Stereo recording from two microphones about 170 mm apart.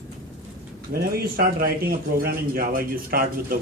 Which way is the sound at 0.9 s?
65° right (ahead or behind).